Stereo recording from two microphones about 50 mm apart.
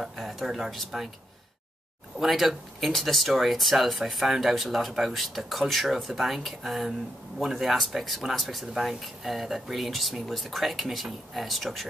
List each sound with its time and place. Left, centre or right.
0.0 s speech: centre
2.1 s speech: centre